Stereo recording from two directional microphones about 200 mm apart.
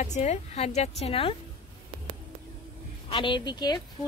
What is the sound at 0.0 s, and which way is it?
A woman's voice, 35° left (ahead or behind).